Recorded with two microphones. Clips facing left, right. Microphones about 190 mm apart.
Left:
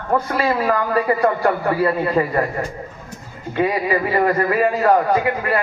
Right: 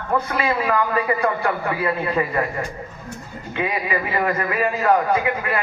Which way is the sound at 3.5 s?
40° left (ahead or behind).